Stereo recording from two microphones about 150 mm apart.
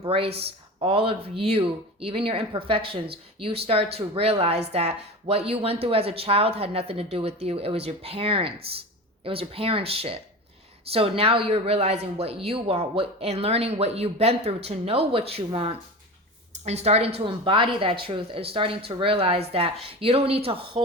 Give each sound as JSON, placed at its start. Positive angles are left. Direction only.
{"t": 0.3, "sound": "speech", "side_deg": -40}